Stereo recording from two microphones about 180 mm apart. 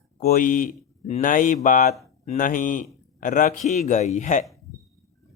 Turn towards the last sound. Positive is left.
turn(degrees=45)  # may be behind; listen again after turning